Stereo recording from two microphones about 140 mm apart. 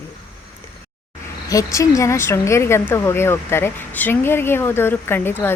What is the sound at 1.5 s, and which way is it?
Speech, 25° left (ahead or behind).